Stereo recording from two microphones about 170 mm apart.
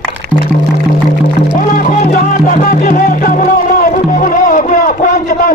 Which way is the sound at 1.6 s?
50° left (ahead or behind).